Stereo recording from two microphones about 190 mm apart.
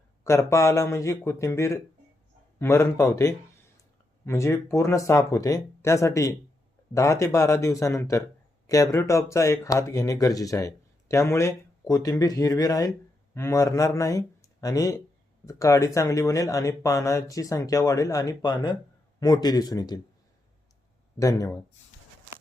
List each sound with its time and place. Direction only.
0.3 s speech: 15° left (ahead or behind)
21.2 s speech: 15° left (ahead or behind)